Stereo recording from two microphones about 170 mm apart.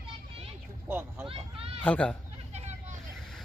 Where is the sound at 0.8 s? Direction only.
15° right (ahead or behind).